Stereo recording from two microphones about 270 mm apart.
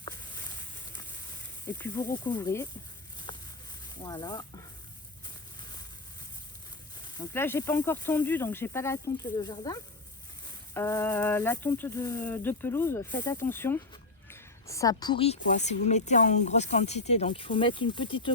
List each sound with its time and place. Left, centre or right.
1.6 s speech: centre
3.3 s a sound: centre
3.8 s speech: centre
7.0 s speech: centre